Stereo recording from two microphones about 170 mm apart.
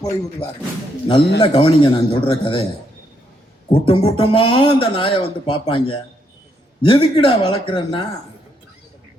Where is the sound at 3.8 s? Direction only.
30° left (ahead or behind).